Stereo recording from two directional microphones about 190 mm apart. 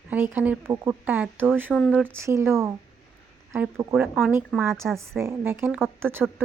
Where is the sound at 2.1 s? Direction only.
15° right (ahead or behind).